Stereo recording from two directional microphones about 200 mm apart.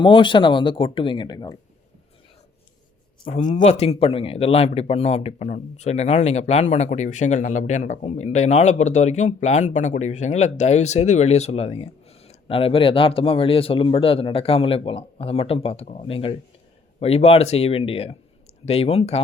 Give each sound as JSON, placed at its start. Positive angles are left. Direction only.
{"t": 0.0, "sound": "speech", "side_deg": 25}
{"t": 3.2, "sound": "speech", "side_deg": 35}